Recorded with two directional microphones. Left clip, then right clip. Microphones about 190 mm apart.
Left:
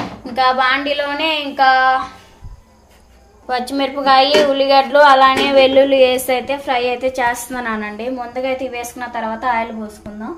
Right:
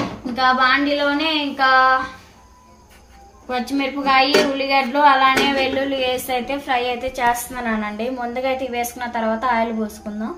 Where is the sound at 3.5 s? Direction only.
40° left (ahead or behind).